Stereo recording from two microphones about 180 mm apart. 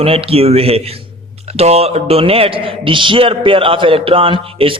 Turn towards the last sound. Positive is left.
turn(degrees=-30)  # may be behind; listen again after turning